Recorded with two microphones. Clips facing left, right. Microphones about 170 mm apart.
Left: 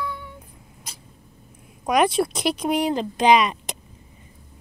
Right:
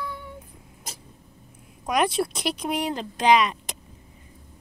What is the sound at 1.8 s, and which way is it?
Speech, centre (ahead or behind).